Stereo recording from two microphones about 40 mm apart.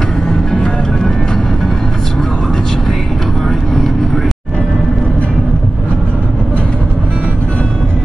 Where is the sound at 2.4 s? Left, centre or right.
Centre.